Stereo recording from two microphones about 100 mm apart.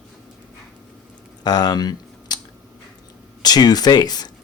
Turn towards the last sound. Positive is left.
turn(degrees=45)  # may be behind; listen again after turning